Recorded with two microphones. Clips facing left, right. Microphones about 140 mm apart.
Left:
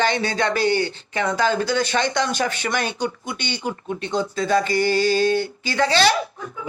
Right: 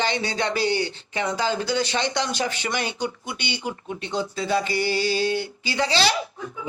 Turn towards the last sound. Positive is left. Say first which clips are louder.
# left 3 dB
turn(degrees=-20)  # may be behind; listen again after turning